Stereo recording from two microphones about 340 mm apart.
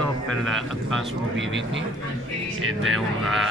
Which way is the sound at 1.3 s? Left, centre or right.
Right.